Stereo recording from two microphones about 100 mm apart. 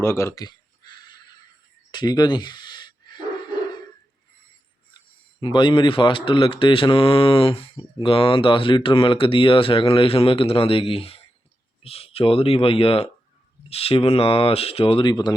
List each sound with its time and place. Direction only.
0.0 s speech: 25° left (ahead or behind)
0.3 s a sound: 45° left (ahead or behind)
1.9 s dog: 45° left (ahead or behind)
4.9 s speech: 50° left (ahead or behind); by 13.1 s 70° left (ahead or behind)
13.7 s speech: 80° left; by 15.1 s 65° left (ahead or behind)
15.1 s speech: 40° left (ahead or behind)